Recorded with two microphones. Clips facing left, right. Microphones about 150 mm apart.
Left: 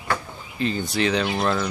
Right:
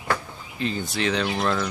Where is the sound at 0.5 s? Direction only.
Centre (ahead or behind).